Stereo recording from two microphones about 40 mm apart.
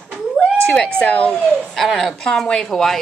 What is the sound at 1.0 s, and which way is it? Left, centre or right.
Speech, left.